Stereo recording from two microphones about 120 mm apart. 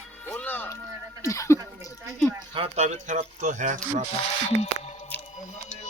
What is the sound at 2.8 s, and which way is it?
Speech, 75° right (ahead or behind).